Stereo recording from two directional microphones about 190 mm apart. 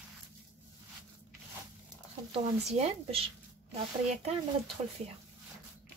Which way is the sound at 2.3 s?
35° right (ahead or behind).